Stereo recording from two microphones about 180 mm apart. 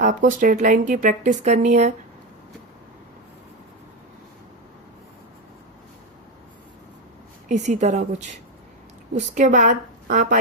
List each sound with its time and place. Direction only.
0.0 s speech: 45° right (ahead or behind)
7.4 s speech: 40° right (ahead or behind)